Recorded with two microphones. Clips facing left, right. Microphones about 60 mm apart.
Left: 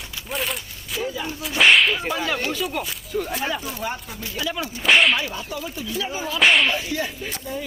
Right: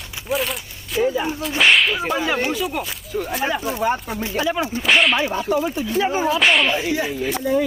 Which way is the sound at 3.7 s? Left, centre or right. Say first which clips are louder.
Right 8 dB; right.